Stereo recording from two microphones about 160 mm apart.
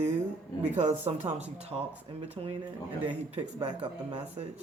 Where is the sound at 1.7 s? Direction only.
15° right (ahead or behind).